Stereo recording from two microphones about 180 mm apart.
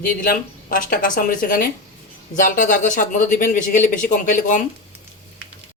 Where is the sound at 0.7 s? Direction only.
50° left (ahead or behind).